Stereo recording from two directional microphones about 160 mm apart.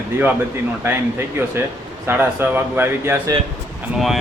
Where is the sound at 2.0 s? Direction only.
15° right (ahead or behind).